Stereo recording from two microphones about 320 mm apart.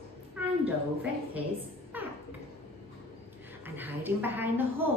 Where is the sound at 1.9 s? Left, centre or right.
Centre.